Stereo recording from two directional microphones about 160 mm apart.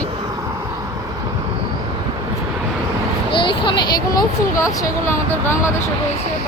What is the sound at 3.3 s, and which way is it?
A woman's voice, 30° left (ahead or behind).